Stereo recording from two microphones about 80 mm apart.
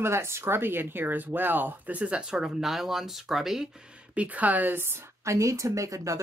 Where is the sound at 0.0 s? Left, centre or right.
Right.